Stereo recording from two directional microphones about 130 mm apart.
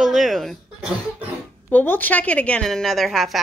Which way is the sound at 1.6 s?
15° left (ahead or behind).